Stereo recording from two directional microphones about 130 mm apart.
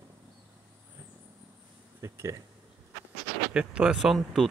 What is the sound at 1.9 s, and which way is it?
Speech, 20° right (ahead or behind).